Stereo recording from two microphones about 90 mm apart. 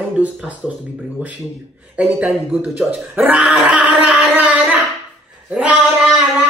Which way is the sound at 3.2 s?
15° right (ahead or behind).